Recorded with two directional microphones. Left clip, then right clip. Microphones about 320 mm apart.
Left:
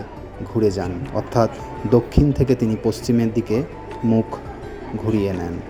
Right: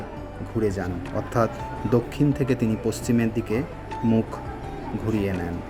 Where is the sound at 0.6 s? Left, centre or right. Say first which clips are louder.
Left 6 dB; centre.